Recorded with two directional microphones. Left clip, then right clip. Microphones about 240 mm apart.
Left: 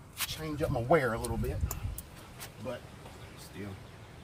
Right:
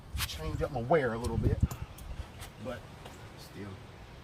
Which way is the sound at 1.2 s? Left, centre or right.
Centre.